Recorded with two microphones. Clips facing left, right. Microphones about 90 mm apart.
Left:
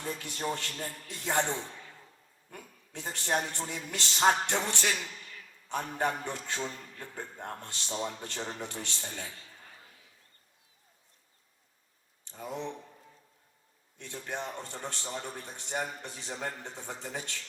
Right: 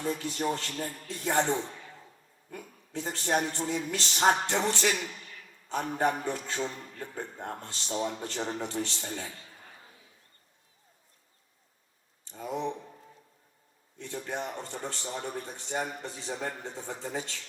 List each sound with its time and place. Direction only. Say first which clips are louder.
0.0 s a man's voice: right 5 dB; 20° right (ahead or behind)
5.2 s a sound: even; 35° right (ahead or behind)
5.7 s speech: right 3 dB; 20° right (ahead or behind)
12.3 s speech: right 4 dB; 20° right (ahead or behind)
14.0 s speech: right 3 dB; 20° right (ahead or behind)